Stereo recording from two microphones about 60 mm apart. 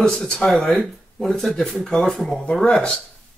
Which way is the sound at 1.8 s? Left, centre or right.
Centre.